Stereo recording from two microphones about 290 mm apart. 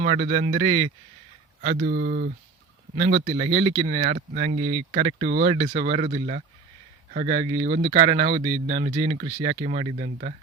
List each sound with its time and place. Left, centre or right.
0.0 s speech: right
4.5 s speech: right
4.9 s speech: right
7.7 s speech: right